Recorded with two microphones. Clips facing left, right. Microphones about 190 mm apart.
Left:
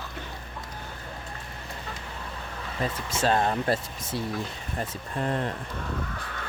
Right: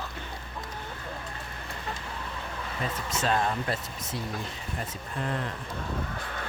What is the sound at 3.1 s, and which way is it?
Speech, 30° left (ahead or behind).